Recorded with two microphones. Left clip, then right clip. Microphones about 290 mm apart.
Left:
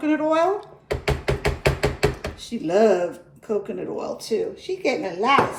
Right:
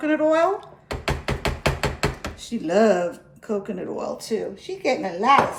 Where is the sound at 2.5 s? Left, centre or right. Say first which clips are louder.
Left 1 dB; right.